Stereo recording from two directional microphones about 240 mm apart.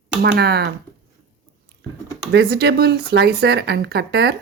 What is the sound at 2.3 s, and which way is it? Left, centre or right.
Speech, right.